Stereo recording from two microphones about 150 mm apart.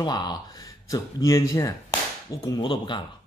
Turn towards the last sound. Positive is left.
turn(degrees=30)  # may be behind; listen again after turning